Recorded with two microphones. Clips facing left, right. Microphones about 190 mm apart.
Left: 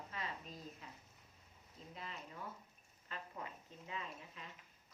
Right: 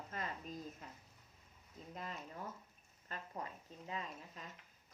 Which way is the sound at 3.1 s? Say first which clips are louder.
Right 2 dB; 40° right (ahead or behind).